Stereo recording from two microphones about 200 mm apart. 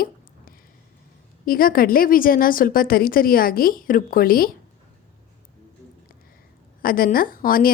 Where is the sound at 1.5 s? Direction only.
45° left (ahead or behind).